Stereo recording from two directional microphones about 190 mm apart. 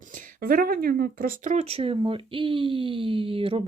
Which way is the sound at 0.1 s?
50° right (ahead or behind).